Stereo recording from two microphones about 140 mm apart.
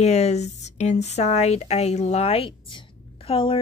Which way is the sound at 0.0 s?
50° left (ahead or behind).